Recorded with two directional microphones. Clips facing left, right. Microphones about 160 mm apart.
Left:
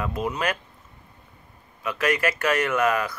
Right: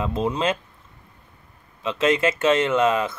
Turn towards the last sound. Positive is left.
turn(degrees=-25)  # may be behind; listen again after turning